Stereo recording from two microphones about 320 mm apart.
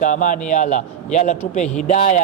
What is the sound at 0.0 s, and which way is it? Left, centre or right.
Speech, left.